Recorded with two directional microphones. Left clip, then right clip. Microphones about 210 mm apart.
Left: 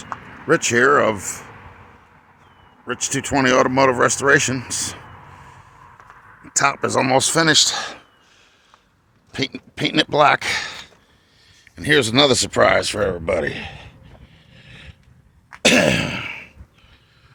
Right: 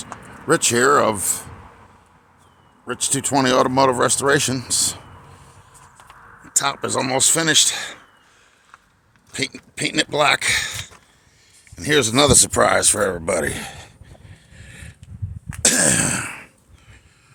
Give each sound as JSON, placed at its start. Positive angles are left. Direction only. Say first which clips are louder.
{"t": 0.4, "sound": "speech", "louder": "left 1 dB", "side_deg": 0}
{"t": 2.8, "sound": "speech", "louder": "even", "side_deg": 0}
{"t": 6.5, "sound": "speech", "louder": "left 4 dB", "side_deg": 15}
{"t": 9.3, "sound": "speech", "louder": "left 1 dB", "side_deg": 20}
{"t": 14.5, "sound": "a sound", "louder": "even", "side_deg": -10}
{"t": 15.6, "sound": "throat clearing", "louder": "left 4 dB", "side_deg": -15}